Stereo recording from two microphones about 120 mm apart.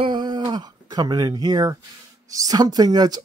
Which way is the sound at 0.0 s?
40° right (ahead or behind).